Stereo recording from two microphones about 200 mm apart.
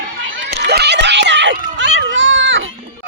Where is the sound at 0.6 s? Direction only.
55° right (ahead or behind).